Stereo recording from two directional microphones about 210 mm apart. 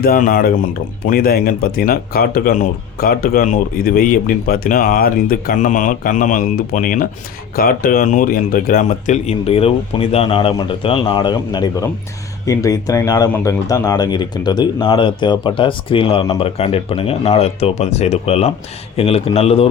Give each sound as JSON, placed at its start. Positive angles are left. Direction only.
{"t": 0.0, "sound": "speech", "side_deg": 45}